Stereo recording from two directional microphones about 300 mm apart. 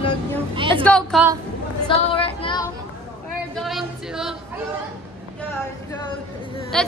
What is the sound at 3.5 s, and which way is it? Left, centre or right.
Speech, centre.